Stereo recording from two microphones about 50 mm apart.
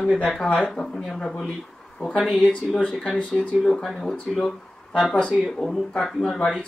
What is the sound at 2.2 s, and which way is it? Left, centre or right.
Speech, centre.